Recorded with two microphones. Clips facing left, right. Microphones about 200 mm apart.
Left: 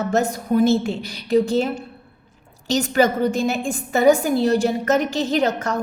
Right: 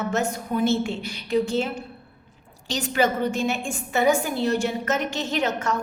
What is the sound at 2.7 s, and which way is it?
A woman's voice, 40° left (ahead or behind).